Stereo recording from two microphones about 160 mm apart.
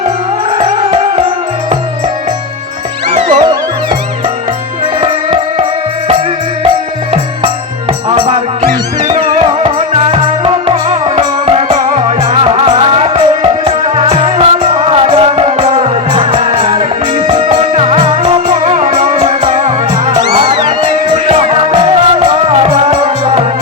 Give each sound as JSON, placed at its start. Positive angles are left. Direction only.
{"t": 0.5, "sound": "music", "side_deg": -35}
{"t": 3.1, "sound": "music", "side_deg": -45}
{"t": 4.9, "sound": "music", "side_deg": -35}
{"t": 9.0, "sound": "music", "side_deg": -45}
{"t": 20.1, "sound": "music", "side_deg": -30}